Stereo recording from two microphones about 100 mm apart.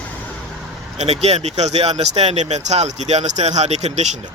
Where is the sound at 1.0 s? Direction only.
90° right.